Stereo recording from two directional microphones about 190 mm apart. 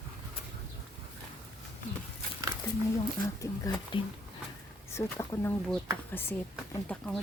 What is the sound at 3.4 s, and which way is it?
A woman's voice, 20° left (ahead or behind).